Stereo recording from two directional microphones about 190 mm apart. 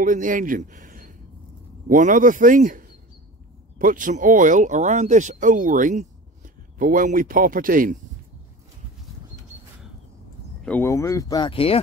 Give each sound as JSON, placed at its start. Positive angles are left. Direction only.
{"t": 0.0, "sound": "a man's voice", "side_deg": -45}
{"t": 10.6, "sound": "speech", "side_deg": 10}